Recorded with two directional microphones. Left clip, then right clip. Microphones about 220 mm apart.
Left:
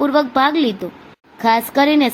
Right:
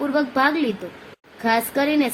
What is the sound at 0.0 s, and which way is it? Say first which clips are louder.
A woman's voice: left 5 dB; 20° left (ahead or behind).